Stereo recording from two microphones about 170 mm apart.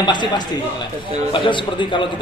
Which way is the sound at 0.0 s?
25° left (ahead or behind).